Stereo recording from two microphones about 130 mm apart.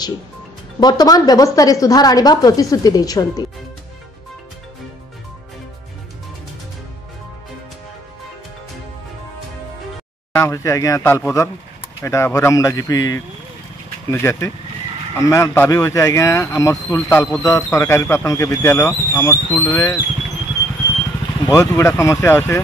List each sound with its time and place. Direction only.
0.7 s a woman's voice: 30° left (ahead or behind)
10.3 s a woman's voice: 20° left (ahead or behind)
21.5 s a woman's voice: 25° left (ahead or behind)